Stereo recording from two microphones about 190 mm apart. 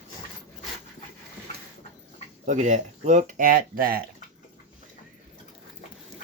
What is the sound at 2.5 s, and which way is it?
Speech, 40° right (ahead or behind).